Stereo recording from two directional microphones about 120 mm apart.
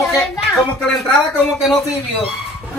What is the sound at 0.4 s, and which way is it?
Speech, centre (ahead or behind).